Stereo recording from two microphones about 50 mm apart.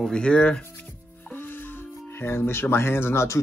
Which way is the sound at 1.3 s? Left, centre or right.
Left.